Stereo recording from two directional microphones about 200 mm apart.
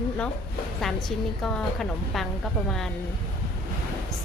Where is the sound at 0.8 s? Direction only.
Centre (ahead or behind).